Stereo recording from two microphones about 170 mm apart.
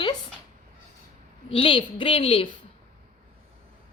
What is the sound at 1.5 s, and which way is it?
A woman's voice, 30° left (ahead or behind).